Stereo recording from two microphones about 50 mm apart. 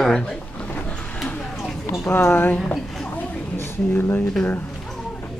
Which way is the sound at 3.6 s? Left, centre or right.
Left.